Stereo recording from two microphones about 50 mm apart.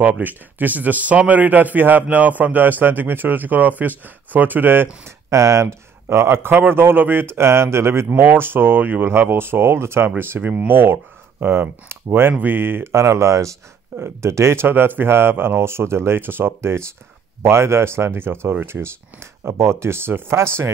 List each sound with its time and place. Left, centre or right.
0.0 s a man's voice: right
5.0 s speech: right
6.1 s speech: right
8.1 s speech: right
9.0 s speech: right
10.4 s a man's voice: right
10.7 s speech: right
12.8 s speech: right
13.9 s speech: right